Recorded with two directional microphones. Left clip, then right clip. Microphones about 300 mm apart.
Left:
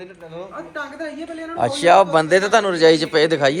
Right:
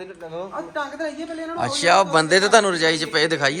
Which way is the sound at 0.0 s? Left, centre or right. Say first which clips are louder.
Right 2 dB; right.